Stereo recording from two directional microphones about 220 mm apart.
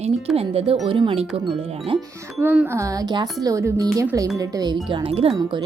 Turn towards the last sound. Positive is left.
turn(degrees=-20)  # may be behind; listen again after turning